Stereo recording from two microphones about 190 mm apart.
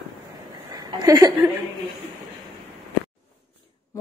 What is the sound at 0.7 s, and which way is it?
Speech, 20° right (ahead or behind).